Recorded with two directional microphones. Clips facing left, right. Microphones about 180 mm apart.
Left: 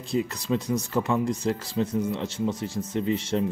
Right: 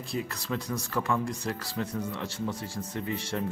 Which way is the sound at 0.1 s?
20° left (ahead or behind).